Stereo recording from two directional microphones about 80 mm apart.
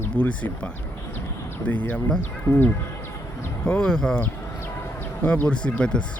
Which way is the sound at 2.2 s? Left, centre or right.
Left.